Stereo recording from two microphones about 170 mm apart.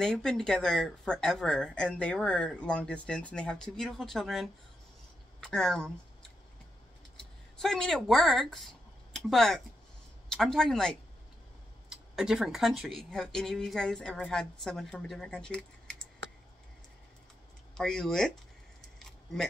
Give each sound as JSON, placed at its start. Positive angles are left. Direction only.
{"t": 0.0, "sound": "speech", "side_deg": 5}
{"t": 7.2, "sound": "speech", "side_deg": 5}
{"t": 11.9, "sound": "speech", "side_deg": 0}
{"t": 17.7, "sound": "speech", "side_deg": 5}
{"t": 18.9, "sound": "a sound", "side_deg": 5}